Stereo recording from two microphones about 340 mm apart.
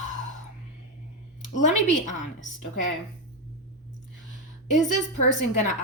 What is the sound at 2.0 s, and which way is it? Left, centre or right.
Speech, left.